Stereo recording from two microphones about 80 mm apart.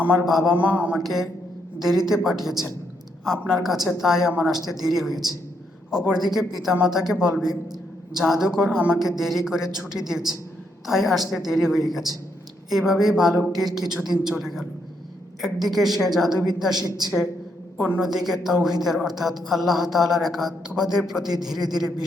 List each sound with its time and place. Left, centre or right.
0.0 s speech: centre
0.3 s speech: centre
0.5 s speech: centre
0.9 s speech: centre
17.7 s a woman's voice: centre
18.0 s speech: centre